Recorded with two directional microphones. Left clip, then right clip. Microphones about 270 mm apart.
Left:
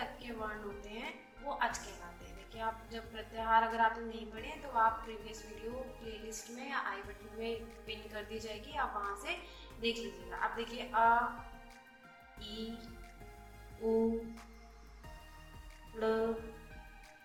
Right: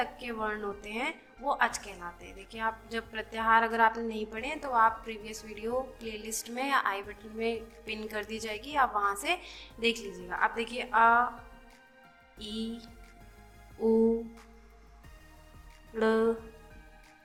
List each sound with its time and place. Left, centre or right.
0.0 s a woman's voice: right
12.4 s a woman's voice: right
16.0 s a woman's voice: right